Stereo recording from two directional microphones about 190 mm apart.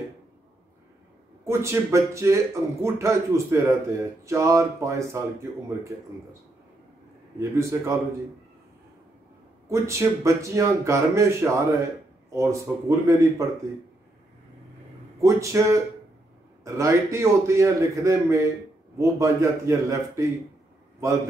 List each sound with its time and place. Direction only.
1.4 s a man's voice: 15° right (ahead or behind)
7.3 s a man's voice: 15° right (ahead or behind)
9.7 s a man's voice: 15° right (ahead or behind)
15.1 s a man's voice: 15° right (ahead or behind)